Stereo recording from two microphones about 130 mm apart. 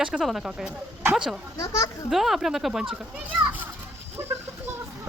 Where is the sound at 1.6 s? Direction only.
25° left (ahead or behind).